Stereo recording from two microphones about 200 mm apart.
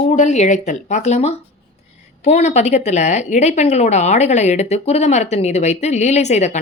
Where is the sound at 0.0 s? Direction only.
35° left (ahead or behind).